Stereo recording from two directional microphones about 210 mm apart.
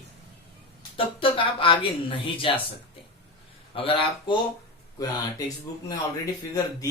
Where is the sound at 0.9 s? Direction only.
25° left (ahead or behind).